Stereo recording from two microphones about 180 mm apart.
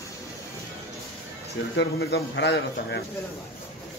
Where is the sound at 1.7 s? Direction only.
75° left (ahead or behind).